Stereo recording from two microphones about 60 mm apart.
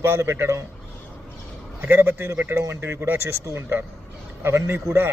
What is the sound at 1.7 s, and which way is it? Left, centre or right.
A man's voice, right.